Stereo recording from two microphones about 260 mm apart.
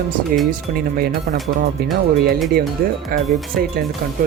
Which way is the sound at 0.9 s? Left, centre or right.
Right.